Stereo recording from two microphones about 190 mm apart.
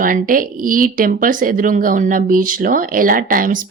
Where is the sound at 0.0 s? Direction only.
45° right (ahead or behind).